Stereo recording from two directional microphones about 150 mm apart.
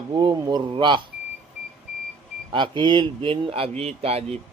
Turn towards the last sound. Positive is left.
turn(degrees=-40)  # may be behind; listen again after turning